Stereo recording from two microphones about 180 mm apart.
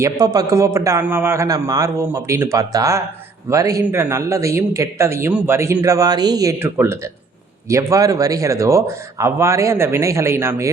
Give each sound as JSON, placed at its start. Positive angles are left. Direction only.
{"t": 0.0, "sound": "a man's voice", "side_deg": -20}